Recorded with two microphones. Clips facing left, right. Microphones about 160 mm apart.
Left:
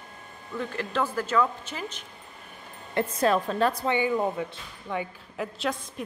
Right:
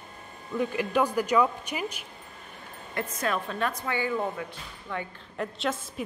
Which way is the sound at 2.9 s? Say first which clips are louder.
Left 6 dB; 30° left (ahead or behind).